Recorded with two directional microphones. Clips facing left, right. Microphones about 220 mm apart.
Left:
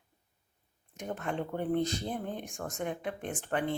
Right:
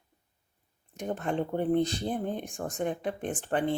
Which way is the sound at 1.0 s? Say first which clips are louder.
Right 5 dB; 35° right (ahead or behind).